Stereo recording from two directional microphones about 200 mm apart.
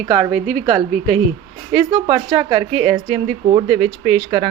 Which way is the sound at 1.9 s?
20° right (ahead or behind).